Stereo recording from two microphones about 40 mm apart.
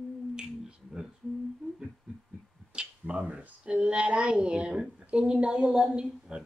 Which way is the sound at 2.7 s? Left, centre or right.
Right.